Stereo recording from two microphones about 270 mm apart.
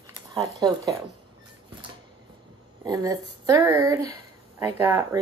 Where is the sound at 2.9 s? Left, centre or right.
Centre.